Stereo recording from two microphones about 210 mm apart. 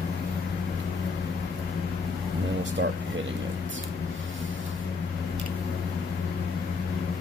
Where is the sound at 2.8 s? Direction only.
60° right (ahead or behind).